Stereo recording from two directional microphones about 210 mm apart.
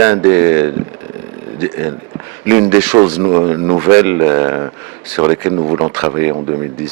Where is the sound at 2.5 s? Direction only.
10° right (ahead or behind).